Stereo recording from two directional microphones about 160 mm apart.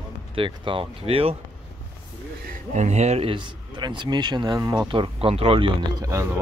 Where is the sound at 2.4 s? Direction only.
45° right (ahead or behind).